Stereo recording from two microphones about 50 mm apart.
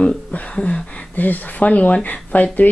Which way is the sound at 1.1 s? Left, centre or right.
Left.